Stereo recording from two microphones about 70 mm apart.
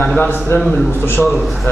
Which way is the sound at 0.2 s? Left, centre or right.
Left.